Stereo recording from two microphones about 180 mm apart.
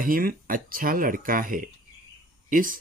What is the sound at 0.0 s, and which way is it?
Speech, 50° right (ahead or behind).